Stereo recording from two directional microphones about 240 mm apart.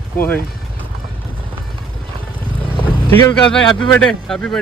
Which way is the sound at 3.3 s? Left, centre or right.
Centre.